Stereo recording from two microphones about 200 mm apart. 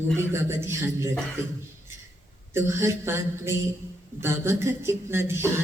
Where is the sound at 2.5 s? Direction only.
10° right (ahead or behind).